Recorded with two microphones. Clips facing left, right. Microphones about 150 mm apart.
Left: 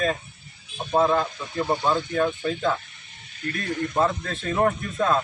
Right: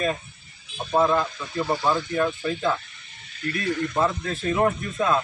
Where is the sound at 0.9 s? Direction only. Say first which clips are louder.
Even; 15° left (ahead or behind).